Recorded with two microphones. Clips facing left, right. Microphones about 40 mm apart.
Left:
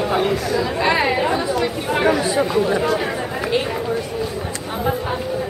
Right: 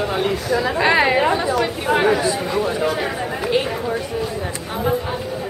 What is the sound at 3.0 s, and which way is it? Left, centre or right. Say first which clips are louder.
Chatter: even; centre.